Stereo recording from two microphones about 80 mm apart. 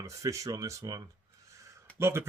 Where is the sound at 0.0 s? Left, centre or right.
Right.